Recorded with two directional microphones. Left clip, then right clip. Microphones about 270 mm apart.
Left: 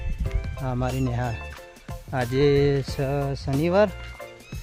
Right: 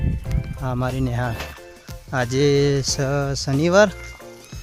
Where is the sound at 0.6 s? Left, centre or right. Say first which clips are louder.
Right 3 dB; centre.